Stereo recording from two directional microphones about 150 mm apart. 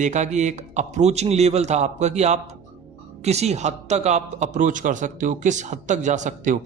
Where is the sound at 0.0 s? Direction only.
50° right (ahead or behind).